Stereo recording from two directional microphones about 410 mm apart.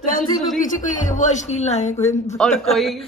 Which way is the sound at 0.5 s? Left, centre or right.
Centre.